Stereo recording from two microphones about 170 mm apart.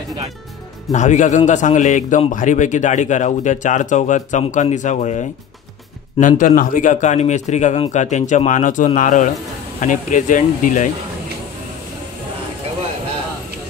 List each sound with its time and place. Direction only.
0.9 s a man's voice: 45° left (ahead or behind)